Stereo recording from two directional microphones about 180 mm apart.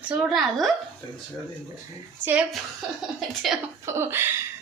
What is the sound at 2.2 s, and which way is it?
Speech, 10° right (ahead or behind).